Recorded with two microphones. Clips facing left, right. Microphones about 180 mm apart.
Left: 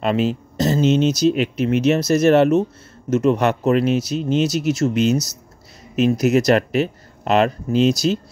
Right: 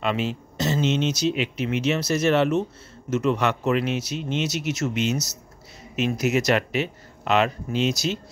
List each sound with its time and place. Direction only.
0.0 s speech: 40° left (ahead or behind)